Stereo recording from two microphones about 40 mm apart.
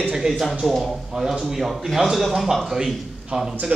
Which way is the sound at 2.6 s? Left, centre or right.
Centre.